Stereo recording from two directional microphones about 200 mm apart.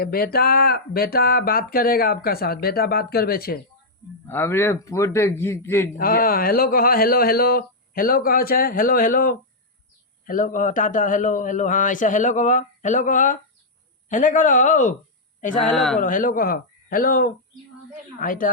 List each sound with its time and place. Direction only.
0.0 s speech: 50° left (ahead or behind)
4.3 s a man's voice: 10° left (ahead or behind)
6.0 s a man's voice: 45° left (ahead or behind)
15.6 s speech: centre (ahead or behind)
16.0 s speech: 40° left (ahead or behind)